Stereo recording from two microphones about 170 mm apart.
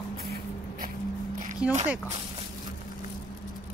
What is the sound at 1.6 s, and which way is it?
Speech, 5° right (ahead or behind).